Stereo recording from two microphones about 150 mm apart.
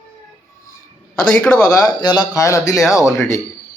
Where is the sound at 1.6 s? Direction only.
25° left (ahead or behind).